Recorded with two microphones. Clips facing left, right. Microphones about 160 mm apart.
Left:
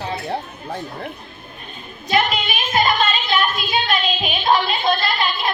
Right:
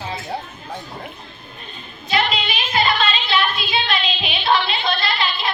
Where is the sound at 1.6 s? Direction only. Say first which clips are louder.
Left 3 dB; 50° left (ahead or behind).